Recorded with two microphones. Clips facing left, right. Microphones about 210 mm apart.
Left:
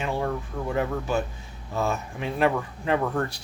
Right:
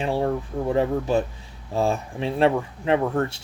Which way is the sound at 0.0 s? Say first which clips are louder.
Right 4 dB; 30° right (ahead or behind).